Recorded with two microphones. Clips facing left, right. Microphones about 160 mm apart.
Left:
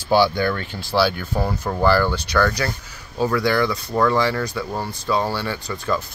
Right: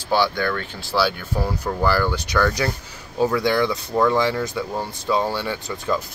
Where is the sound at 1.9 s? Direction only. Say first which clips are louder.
Left 4 dB; 10° right (ahead or behind).